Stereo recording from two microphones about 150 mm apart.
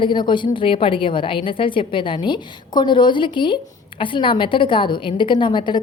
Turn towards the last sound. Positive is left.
turn(degrees=30)  # may be behind; listen again after turning